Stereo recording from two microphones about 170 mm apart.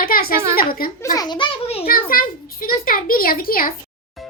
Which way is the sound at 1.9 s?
60° left (ahead or behind).